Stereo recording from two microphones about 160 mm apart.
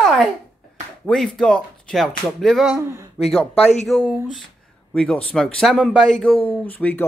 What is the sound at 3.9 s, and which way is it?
Speech, 5° right (ahead or behind).